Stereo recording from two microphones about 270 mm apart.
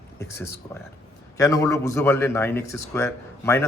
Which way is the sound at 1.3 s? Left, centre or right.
Centre.